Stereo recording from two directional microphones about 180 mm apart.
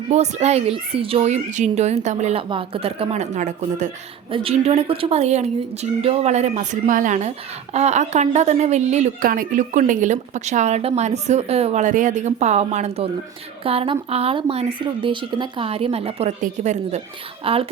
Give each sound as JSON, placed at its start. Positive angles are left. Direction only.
{"t": 0.1, "sound": "speech", "side_deg": -40}